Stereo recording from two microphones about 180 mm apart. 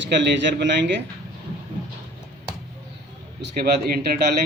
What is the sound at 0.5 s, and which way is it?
Speech, 75° right (ahead or behind).